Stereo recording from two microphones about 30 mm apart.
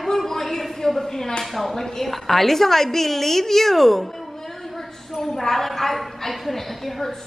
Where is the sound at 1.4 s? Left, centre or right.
Centre.